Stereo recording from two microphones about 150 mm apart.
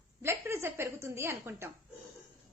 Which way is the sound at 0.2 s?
15° right (ahead or behind).